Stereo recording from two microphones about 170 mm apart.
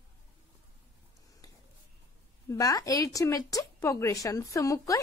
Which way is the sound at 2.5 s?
20° left (ahead or behind).